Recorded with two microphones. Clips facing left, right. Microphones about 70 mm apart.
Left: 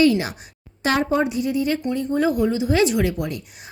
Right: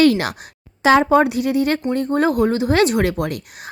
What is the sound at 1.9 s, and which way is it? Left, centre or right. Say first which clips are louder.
Speech: right 3 dB; right.